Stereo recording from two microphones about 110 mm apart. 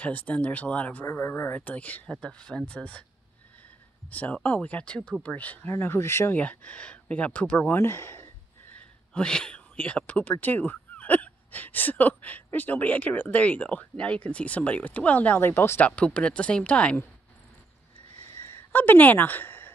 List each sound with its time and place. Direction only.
0.0 s speech: 15° left (ahead or behind)
4.1 s speech: 15° left (ahead or behind)
9.1 s speech: 10° left (ahead or behind)
18.4 s a sound: 15° left (ahead or behind)